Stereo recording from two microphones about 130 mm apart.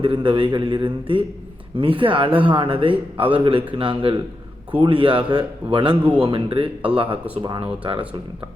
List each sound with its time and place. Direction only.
0.0 s a man's voice: 40° right (ahead or behind)